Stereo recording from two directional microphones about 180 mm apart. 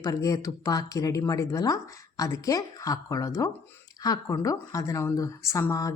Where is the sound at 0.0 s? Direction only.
20° left (ahead or behind).